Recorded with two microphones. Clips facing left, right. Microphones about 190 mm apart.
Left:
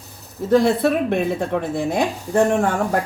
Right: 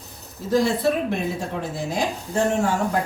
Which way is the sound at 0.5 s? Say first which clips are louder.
Left 4 dB; 60° left (ahead or behind).